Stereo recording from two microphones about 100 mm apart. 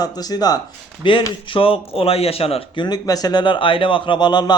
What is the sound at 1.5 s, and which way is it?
Speech, 65° left (ahead or behind).